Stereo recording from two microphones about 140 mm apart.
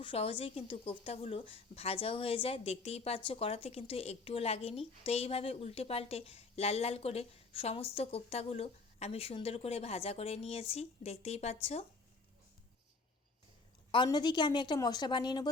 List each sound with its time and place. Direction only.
0.0 s a woman's voice: 40° left (ahead or behind)
13.9 s a woman's voice: 35° left (ahead or behind)